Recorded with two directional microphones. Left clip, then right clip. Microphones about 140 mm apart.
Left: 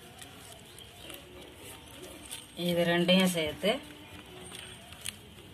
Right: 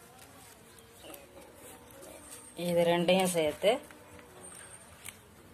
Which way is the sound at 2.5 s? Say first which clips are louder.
Right 1 dB; 55° right (ahead or behind).